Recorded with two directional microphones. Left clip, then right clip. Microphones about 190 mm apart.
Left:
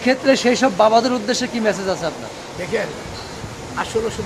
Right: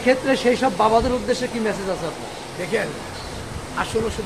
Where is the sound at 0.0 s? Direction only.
60° left (ahead or behind).